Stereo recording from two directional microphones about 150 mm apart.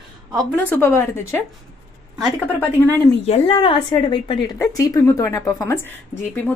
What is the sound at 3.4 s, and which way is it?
A woman's voice, 30° left (ahead or behind).